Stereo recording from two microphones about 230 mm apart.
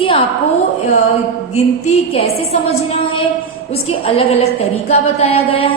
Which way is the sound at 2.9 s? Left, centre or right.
Left.